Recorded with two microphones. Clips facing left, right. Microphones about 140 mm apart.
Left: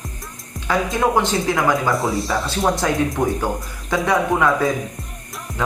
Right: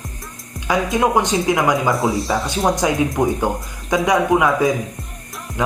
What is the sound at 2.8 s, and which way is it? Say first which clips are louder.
Speech: right 2 dB; 15° right (ahead or behind).